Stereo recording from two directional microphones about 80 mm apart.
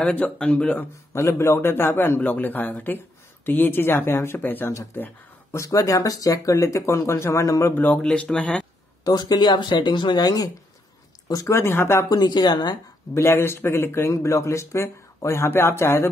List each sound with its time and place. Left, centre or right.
0.0 s speech: centre
0.7 s a man's voice: left
5.7 s speech: left
7.7 s speech: left
9.0 s speech: left
12.1 s speech: left
13.1 s speech: left